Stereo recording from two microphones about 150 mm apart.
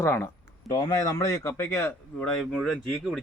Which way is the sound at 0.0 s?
15° left (ahead or behind).